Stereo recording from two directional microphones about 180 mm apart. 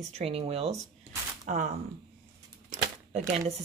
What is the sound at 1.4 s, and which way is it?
Speech, 45° right (ahead or behind).